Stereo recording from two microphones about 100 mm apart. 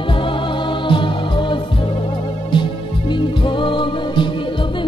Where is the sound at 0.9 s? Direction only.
55° left (ahead or behind).